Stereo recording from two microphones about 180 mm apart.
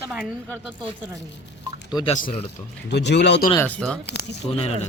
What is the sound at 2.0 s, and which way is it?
Speech, 45° left (ahead or behind).